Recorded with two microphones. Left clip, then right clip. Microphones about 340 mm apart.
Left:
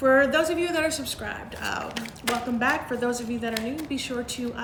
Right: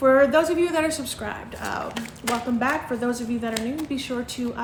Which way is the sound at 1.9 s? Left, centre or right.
Centre.